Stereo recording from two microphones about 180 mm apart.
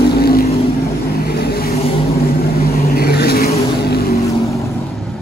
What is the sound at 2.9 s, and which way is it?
Vehicle, 60° left (ahead or behind).